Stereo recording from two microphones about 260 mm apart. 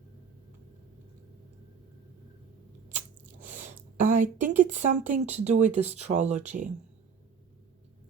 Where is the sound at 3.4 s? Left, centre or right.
Right.